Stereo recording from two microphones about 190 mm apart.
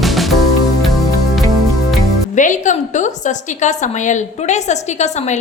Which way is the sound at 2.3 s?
40° left (ahead or behind).